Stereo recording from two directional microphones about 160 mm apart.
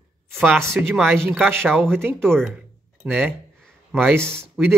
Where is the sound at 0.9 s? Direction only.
5° left (ahead or behind).